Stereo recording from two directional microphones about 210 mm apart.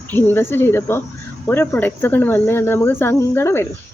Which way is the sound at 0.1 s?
10° left (ahead or behind).